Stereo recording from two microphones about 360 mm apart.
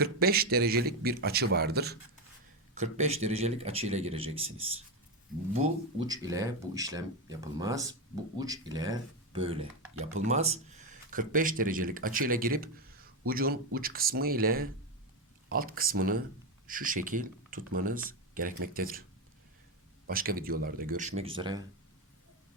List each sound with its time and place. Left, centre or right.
0.0 s a man's voice: right
6.0 s a man's voice: centre
20.1 s a man's voice: right